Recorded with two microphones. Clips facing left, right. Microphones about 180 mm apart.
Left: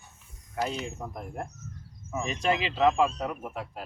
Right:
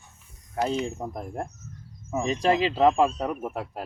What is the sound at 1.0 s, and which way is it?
Speech, 35° right (ahead or behind).